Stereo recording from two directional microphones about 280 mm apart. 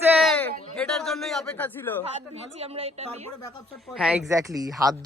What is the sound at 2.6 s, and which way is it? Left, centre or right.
Speech, right.